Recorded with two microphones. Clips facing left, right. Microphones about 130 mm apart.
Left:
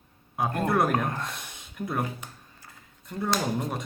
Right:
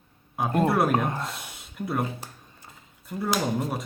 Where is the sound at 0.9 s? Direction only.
20° right (ahead or behind).